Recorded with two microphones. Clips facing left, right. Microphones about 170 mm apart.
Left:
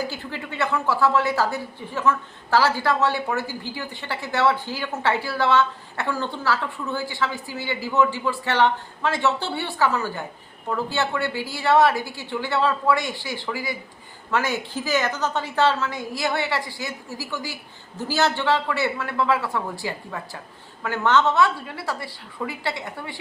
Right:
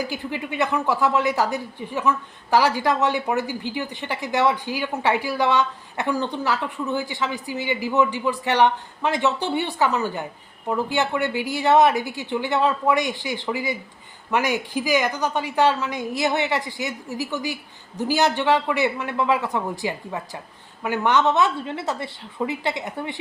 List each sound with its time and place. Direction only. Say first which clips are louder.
0.0 s a woman's voice: right 2 dB; 15° right (ahead or behind)